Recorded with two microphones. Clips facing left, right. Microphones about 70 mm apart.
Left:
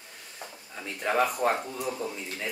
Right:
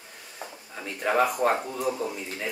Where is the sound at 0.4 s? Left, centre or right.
Centre.